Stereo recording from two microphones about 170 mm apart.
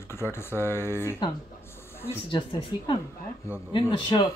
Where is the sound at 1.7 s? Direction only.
15° left (ahead or behind).